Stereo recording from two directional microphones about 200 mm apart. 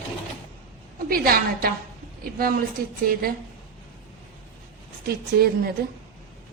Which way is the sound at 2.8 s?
50° right (ahead or behind).